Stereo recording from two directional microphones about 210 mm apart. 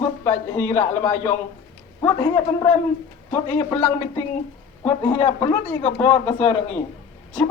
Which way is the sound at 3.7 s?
10° left (ahead or behind).